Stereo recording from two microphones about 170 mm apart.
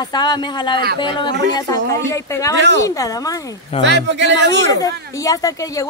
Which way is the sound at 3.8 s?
90° right.